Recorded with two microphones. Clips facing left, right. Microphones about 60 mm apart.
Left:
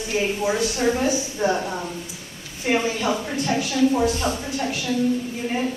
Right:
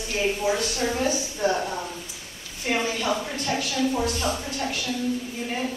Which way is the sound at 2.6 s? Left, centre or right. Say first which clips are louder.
Left 4 dB; left.